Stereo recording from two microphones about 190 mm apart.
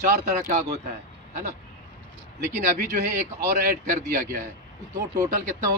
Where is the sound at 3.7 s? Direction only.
40° right (ahead or behind).